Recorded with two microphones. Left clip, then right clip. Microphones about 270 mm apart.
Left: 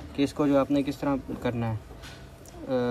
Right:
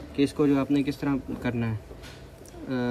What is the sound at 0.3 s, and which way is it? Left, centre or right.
Speech, centre.